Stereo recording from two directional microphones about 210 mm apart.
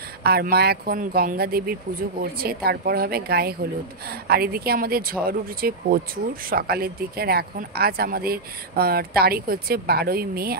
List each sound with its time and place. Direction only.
0.2 s speech: 45° right (ahead or behind)